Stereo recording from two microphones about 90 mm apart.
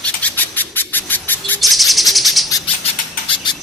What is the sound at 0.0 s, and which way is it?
Bird, 15° left (ahead or behind).